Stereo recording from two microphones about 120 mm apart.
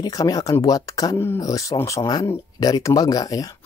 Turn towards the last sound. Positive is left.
turn(degrees=30)  # may be behind; listen again after turning